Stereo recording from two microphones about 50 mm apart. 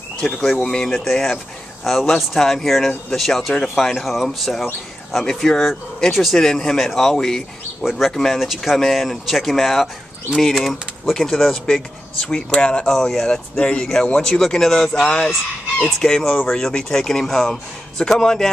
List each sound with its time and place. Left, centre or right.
0.4 s speech: centre
12.8 s speech: centre